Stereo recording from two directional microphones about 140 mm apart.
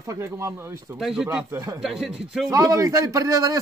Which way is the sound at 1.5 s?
20° right (ahead or behind).